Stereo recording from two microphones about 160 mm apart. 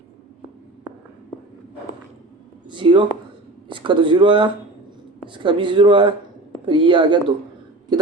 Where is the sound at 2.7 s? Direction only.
30° right (ahead or behind).